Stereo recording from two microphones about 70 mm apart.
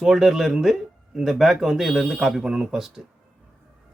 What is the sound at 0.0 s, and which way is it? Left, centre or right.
Speech, centre.